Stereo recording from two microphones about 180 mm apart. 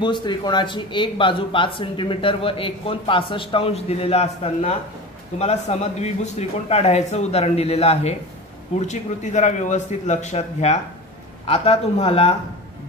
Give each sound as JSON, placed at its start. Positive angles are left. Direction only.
{"t": 0.0, "sound": "speech", "side_deg": 25}